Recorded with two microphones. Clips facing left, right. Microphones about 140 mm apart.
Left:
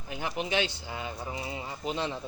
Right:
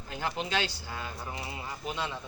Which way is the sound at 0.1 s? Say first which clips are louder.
Left 1 dB; 15° left (ahead or behind).